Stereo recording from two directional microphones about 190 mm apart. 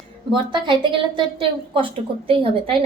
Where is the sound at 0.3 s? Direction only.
25° right (ahead or behind).